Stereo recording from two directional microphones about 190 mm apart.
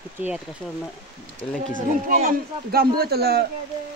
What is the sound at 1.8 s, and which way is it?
A man's voice, 45° right (ahead or behind).